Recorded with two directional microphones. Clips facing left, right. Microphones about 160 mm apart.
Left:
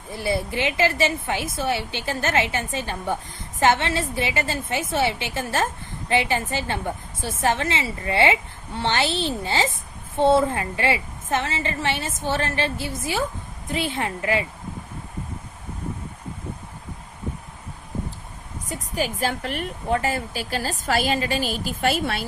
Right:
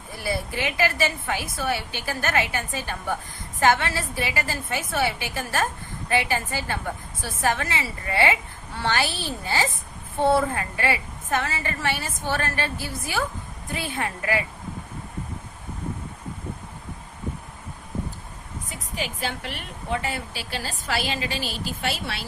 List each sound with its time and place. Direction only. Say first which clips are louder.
0.1 s a woman's voice: left 4 dB; 25° left (ahead or behind)
18.7 s a woman's voice: left 6 dB; 40° left (ahead or behind)